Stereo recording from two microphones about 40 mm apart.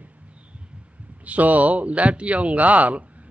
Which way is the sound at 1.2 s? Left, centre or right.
Right.